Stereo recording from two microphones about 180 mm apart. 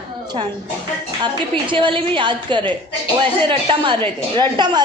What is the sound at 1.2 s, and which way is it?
A woman's voice, 25° right (ahead or behind).